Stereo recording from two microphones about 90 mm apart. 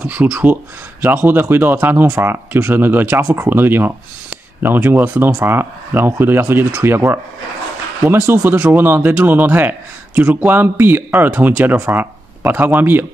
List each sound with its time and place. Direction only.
0.0 s speech: 15° right (ahead or behind)